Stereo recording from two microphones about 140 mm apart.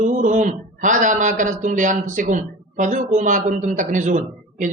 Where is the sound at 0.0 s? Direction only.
60° right (ahead or behind).